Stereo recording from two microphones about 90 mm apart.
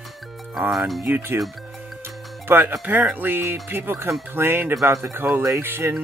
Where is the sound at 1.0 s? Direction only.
25° right (ahead or behind).